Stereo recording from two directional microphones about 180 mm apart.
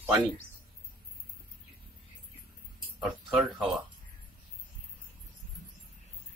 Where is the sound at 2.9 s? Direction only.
5° right (ahead or behind).